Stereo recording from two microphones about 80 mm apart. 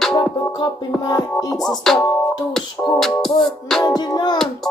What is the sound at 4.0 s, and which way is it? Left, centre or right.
Music, left.